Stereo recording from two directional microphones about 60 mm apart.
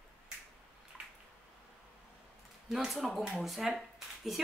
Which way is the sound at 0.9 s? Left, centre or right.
Centre.